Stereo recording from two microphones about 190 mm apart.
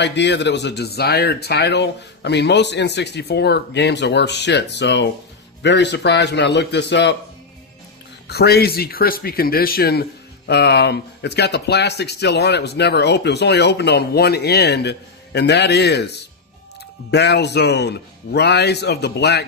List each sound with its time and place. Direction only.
0.0 s speech: 65° left (ahead or behind)
8.3 s speech: 55° left (ahead or behind)